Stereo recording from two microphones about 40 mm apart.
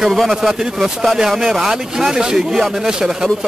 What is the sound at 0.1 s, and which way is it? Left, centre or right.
Speech, centre.